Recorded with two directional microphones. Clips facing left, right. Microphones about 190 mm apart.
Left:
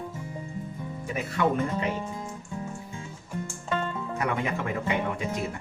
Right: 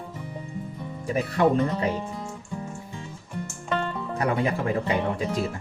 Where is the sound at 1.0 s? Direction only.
35° right (ahead or behind).